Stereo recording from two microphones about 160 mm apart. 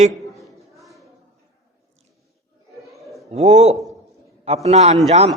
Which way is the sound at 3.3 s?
45° right (ahead or behind).